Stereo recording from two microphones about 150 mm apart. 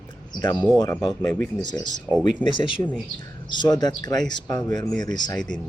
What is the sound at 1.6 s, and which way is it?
Speech, 30° left (ahead or behind).